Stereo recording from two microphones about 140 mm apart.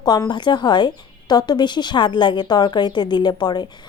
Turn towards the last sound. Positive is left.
turn(degrees=30)  # may be behind; listen again after turning